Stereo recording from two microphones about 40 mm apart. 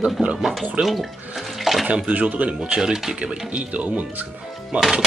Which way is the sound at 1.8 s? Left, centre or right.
Right.